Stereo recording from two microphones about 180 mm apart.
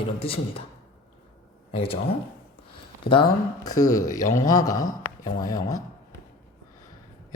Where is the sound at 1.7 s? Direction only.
30° left (ahead or behind).